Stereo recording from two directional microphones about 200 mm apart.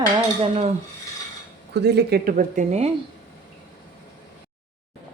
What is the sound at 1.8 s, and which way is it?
Speech, 55° right (ahead or behind).